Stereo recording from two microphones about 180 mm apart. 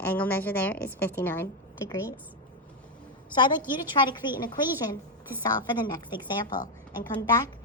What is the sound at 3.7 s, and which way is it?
Speech, 25° left (ahead or behind).